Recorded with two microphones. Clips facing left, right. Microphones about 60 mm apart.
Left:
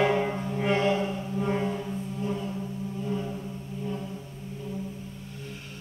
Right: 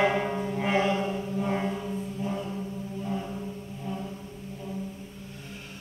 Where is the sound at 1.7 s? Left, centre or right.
Centre.